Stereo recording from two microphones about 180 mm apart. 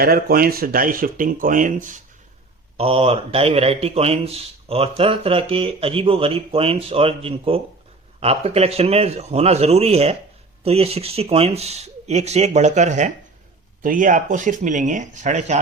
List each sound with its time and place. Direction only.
0.0 s speech: 55° right (ahead or behind)
2.7 s speech: 30° right (ahead or behind)